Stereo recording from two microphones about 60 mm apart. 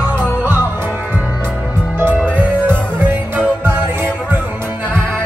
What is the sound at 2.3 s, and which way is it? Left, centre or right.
Music, right.